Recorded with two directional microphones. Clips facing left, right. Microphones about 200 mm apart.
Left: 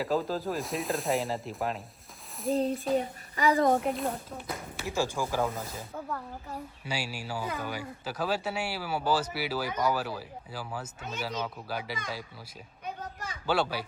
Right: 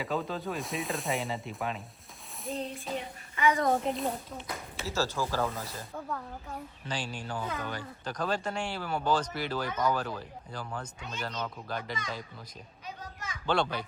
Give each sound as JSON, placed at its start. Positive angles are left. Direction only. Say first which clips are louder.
{"t": 0.0, "sound": "speech", "louder": "left 4 dB", "side_deg": 0}
{"t": 2.9, "sound": "a woman's voice", "louder": "left 8 dB", "side_deg": 40}
{"t": 3.7, "sound": "speech", "louder": "left 2 dB", "side_deg": 0}
{"t": 5.7, "sound": "speech", "louder": "left 1 dB", "side_deg": 0}
{"t": 13.4, "sound": "speech", "louder": "left 1 dB", "side_deg": 5}